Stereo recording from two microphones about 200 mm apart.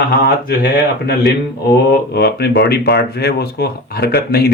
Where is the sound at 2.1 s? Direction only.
55° left (ahead or behind).